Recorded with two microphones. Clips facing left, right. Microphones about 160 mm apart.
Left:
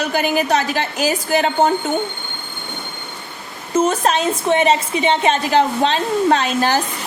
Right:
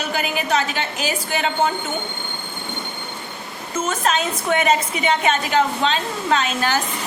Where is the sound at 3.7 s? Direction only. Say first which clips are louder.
Left 5 dB; 35° left (ahead or behind).